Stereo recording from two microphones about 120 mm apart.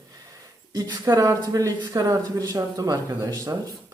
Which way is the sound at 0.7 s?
30° right (ahead or behind).